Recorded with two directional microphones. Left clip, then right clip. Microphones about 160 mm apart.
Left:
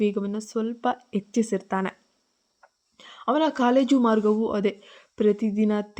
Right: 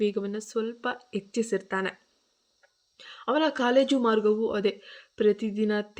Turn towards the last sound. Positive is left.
turn(degrees=35)  # may be behind; listen again after turning